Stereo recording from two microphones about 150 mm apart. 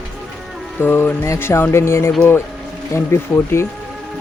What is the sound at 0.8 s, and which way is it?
Speech, 15° left (ahead or behind).